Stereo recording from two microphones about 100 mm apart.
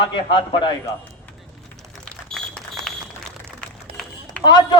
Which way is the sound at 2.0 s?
5° left (ahead or behind).